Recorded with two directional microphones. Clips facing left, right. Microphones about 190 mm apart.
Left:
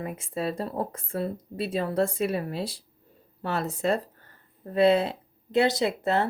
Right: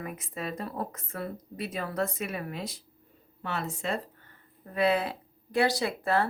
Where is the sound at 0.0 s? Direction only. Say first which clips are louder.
Left 6 dB; 30° left (ahead or behind).